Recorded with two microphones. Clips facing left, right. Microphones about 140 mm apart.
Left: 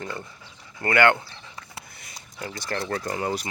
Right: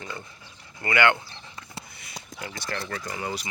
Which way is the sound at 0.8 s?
45° left (ahead or behind).